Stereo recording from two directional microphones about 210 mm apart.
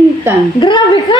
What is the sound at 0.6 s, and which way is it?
Speech, 20° left (ahead or behind).